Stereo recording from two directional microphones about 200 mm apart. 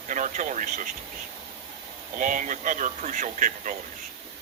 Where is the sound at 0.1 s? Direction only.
40° right (ahead or behind).